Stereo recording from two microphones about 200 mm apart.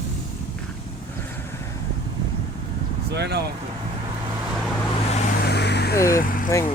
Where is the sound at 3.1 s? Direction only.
55° right (ahead or behind).